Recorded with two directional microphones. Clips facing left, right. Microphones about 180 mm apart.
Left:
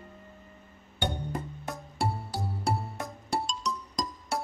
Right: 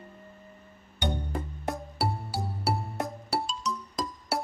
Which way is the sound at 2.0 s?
5° right (ahead or behind).